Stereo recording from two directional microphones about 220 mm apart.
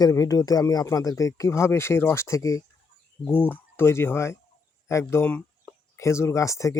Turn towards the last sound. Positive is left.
turn(degrees=15)  # may be behind; listen again after turning